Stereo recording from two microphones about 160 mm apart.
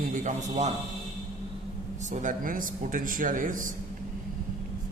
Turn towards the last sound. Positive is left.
turn(degrees=-55)  # may be behind; listen again after turning